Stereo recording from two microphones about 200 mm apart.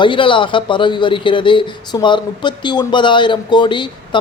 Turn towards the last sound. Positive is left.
turn(degrees=25)  # may be behind; listen again after turning